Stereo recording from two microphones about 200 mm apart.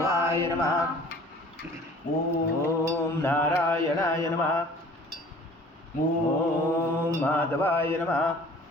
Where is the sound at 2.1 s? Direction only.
20° left (ahead or behind).